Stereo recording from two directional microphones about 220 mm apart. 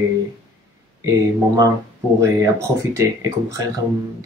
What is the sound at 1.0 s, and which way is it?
Speech, 15° right (ahead or behind).